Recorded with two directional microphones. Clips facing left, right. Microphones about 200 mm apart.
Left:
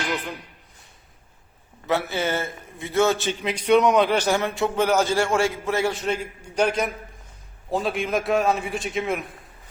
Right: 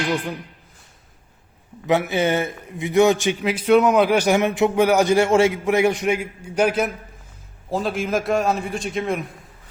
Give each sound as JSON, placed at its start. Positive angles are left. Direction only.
{"t": 1.9, "sound": "a man's voice", "side_deg": -20}
{"t": 3.4, "sound": "a man's voice", "side_deg": -5}